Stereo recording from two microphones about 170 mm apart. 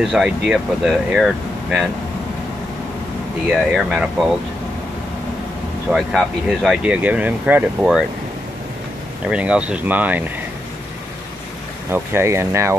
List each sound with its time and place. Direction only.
0.0 s speech: 5° right (ahead or behind)
3.4 s speech: 5° right (ahead or behind)
5.9 s speech: centre (ahead or behind)
9.2 s speech: 5° right (ahead or behind)
11.9 s speech: 15° right (ahead or behind)